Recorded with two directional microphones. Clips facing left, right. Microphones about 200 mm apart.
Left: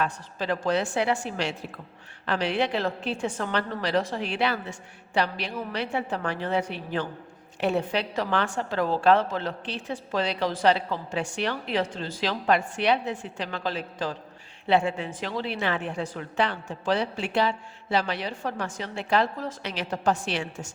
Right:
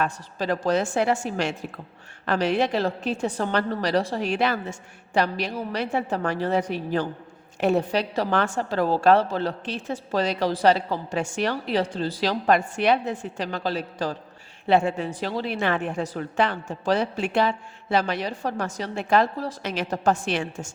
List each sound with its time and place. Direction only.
0.0 s a woman's voice: 40° right (ahead or behind)